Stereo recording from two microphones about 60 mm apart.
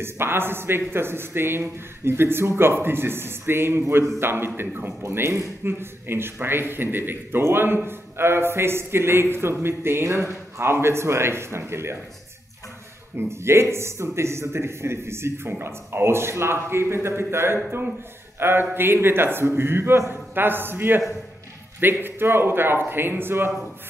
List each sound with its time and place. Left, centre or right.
0.0 s a man's voice: right
13.3 s a man's voice: right